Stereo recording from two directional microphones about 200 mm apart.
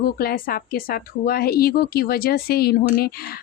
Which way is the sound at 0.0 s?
50° left (ahead or behind).